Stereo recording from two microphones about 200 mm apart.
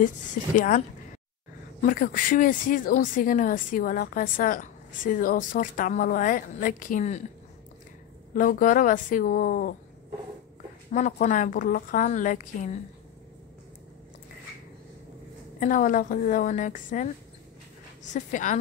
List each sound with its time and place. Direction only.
0.6 s a woman's voice: 40° left (ahead or behind)
8.4 s a woman's voice: 45° left (ahead or behind)
10.9 s a woman's voice: 40° left (ahead or behind)
15.6 s a woman's voice: 40° left (ahead or behind)
18.1 s a woman's voice: 40° left (ahead or behind)